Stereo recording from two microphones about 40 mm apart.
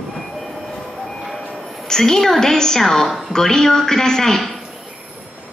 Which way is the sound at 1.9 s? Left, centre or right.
Centre.